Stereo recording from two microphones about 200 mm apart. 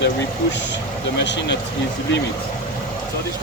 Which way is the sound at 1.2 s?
60° left (ahead or behind).